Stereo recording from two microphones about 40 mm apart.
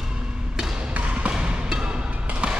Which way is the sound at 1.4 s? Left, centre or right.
Centre.